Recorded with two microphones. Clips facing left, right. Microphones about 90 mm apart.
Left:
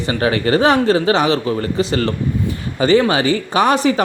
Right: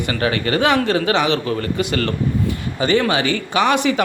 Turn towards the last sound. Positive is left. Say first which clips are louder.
# left 2 dB
turn(degrees=35)  # may be behind; listen again after turning